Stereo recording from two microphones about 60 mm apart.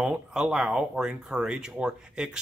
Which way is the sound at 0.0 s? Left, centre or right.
Centre.